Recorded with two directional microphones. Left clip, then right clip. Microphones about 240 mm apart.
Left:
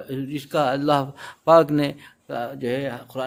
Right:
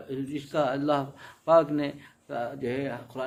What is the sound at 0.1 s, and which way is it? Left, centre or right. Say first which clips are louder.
Speech: left 5 dB; left.